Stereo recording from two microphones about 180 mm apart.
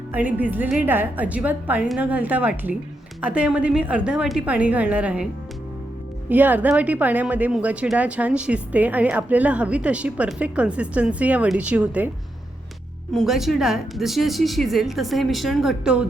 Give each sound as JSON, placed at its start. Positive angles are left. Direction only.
{"t": 0.1, "sound": "a woman's voice", "side_deg": -10}
{"t": 13.1, "sound": "a woman's voice", "side_deg": 0}